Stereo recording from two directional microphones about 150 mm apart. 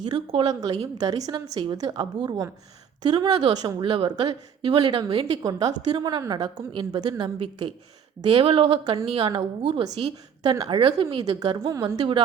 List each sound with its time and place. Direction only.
0.0 s a woman's voice: 35° right (ahead or behind)
5.2 s a woman's voice: 25° right (ahead or behind)